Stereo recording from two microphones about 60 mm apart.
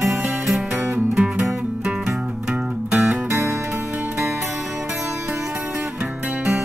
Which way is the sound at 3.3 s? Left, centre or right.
Right.